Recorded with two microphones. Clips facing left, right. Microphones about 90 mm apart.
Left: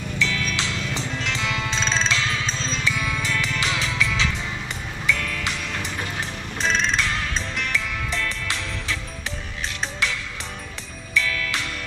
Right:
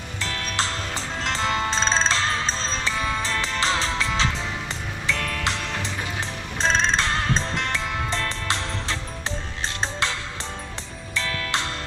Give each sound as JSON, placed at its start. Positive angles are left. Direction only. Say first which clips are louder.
{"t": 0.2, "sound": "music", "louder": "left 1 dB", "side_deg": -45}
{"t": 11.2, "sound": "music", "louder": "left 1 dB", "side_deg": -40}